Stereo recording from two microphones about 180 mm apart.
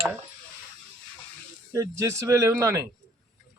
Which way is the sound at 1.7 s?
15° right (ahead or behind).